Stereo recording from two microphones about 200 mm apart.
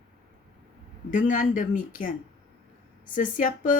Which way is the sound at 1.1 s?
40° left (ahead or behind).